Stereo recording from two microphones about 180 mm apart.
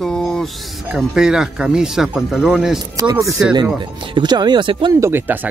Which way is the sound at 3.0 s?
20° right (ahead or behind).